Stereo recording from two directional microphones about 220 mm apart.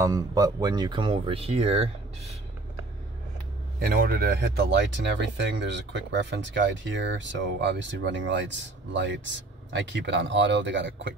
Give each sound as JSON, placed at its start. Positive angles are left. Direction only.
{"t": 0.0, "sound": "speech", "side_deg": -15}
{"t": 3.8, "sound": "speech", "side_deg": -40}